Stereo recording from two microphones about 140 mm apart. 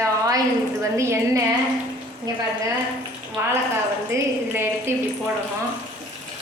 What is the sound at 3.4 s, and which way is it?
A woman's voice, 15° right (ahead or behind).